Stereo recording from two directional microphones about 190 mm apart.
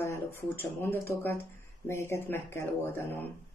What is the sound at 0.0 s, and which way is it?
Speech, 15° left (ahead or behind).